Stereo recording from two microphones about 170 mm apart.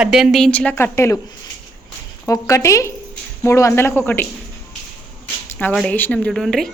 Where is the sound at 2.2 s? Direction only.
20° left (ahead or behind).